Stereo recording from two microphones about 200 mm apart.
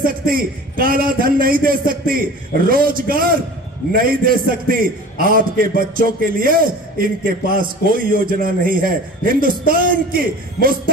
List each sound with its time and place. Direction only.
0.0 s a man's voice: 45° right (ahead or behind)